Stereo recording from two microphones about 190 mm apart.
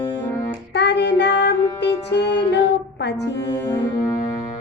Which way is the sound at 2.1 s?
65° left (ahead or behind).